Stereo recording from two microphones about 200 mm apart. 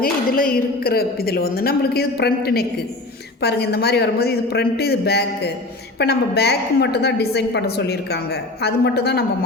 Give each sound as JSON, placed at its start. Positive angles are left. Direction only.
{"t": 0.0, "sound": "a woman's voice", "side_deg": 45}